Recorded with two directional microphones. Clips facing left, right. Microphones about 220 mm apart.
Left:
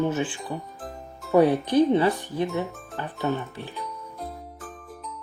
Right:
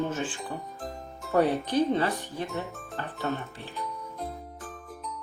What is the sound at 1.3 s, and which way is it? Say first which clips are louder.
Speech: left 5 dB; 15° left (ahead or behind).